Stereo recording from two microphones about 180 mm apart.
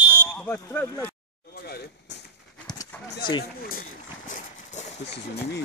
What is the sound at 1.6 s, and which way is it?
Vehicle, 60° left (ahead or behind).